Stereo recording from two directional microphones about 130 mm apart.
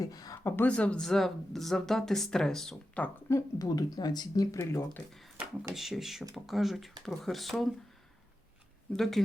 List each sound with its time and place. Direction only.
0.0 s speech: 30° left (ahead or behind); by 3.1 s 5° left (ahead or behind)
3.2 s speech: 25° left (ahead or behind)
4.5 s speech: 20° left (ahead or behind)
5.7 s speech: centre (ahead or behind)
8.9 s speech: centre (ahead or behind)